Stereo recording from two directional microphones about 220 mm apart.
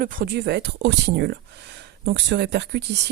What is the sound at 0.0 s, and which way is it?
Speech, 40° right (ahead or behind).